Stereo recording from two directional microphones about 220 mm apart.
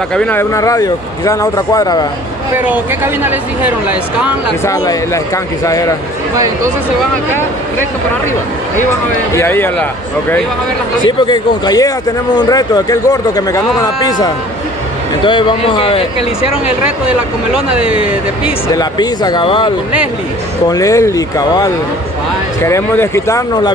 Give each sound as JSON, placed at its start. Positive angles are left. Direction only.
{"t": 0.1, "sound": "speech", "side_deg": 5}
{"t": 2.5, "sound": "speech", "side_deg": -10}
{"t": 4.6, "sound": "speech", "side_deg": 15}
{"t": 9.3, "sound": "speech", "side_deg": 10}
{"t": 11.1, "sound": "speech", "side_deg": 20}
{"t": 15.2, "sound": "speech", "side_deg": 20}
{"t": 17.7, "sound": "speech", "side_deg": -5}
{"t": 18.7, "sound": "speech", "side_deg": 20}